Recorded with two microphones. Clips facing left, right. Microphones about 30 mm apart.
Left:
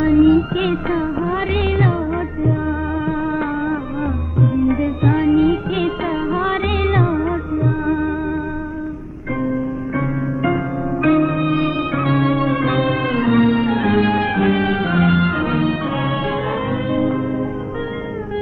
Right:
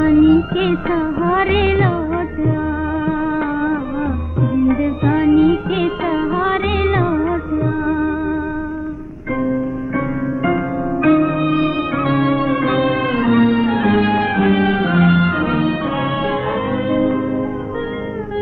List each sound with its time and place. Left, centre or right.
0.0 s music: centre
1.2 s music: centre
9.4 s music: centre